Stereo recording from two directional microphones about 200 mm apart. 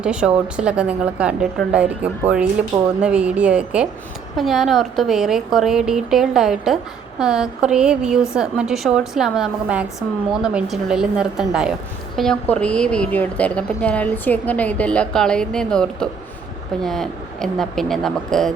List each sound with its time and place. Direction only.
0.0 s a woman's voice: 5° right (ahead or behind)